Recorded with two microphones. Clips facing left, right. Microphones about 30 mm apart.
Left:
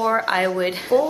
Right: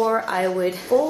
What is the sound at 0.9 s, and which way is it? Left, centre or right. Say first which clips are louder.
Speech: left 1 dB; left.